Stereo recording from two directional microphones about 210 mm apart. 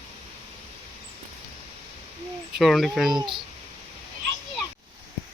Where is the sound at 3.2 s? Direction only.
20° right (ahead or behind).